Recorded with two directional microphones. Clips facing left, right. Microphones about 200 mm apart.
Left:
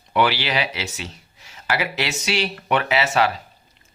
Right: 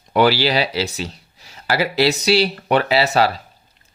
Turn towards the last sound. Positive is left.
turn(degrees=-35)  # may be behind; listen again after turning